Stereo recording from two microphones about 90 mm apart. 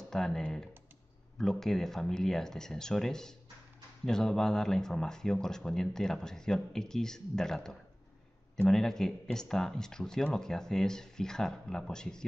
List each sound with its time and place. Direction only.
0.1 s speech: 5° left (ahead or behind)